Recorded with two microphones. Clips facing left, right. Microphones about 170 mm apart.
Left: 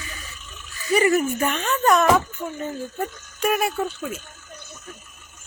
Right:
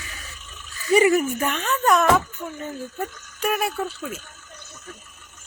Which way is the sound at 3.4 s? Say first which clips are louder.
Left 2 dB; centre (ahead or behind).